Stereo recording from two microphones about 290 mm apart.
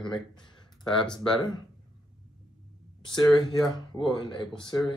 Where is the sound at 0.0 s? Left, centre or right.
Centre.